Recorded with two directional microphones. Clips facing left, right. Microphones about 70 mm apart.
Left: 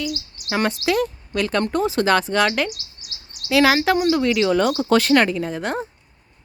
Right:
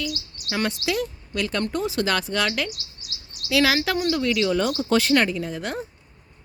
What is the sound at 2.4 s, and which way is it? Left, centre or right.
Speech, left.